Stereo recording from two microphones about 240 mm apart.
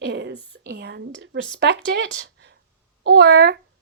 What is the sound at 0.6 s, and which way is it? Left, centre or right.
Speech, right.